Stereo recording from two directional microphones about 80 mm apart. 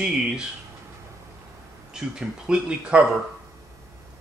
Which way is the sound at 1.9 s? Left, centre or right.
Centre.